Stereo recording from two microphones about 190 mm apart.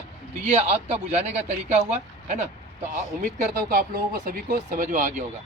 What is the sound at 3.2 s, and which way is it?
Speech, 45° right (ahead or behind).